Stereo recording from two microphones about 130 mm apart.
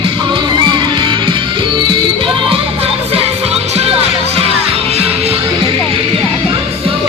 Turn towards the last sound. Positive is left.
turn(degrees=-50)  # may be behind; listen again after turning